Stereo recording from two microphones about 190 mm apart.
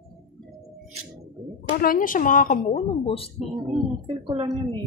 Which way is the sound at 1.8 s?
45° left (ahead or behind).